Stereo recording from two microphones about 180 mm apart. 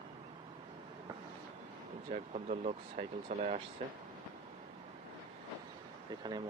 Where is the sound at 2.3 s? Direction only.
40° right (ahead or behind).